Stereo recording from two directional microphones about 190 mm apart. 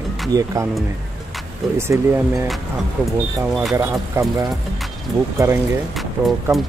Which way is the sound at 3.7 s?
10° right (ahead or behind).